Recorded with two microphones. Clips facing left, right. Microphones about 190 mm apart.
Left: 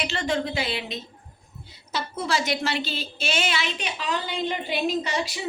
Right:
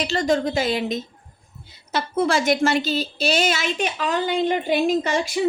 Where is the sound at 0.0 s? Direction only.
40° right (ahead or behind).